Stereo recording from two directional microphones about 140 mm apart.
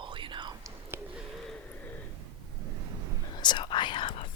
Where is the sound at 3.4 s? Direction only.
35° left (ahead or behind).